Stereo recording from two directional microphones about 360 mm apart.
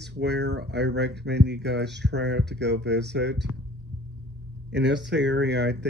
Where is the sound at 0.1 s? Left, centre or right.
Right.